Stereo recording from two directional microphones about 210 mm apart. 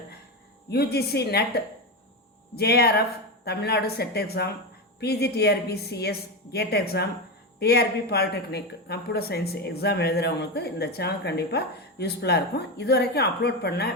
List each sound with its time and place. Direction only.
0.7 s speech: 50° left (ahead or behind)